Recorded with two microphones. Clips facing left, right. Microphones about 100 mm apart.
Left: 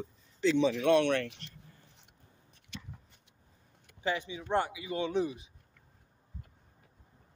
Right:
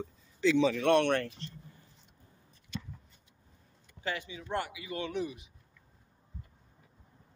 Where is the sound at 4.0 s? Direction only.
20° left (ahead or behind).